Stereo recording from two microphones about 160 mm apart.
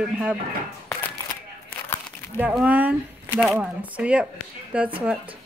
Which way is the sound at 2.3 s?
10° right (ahead or behind).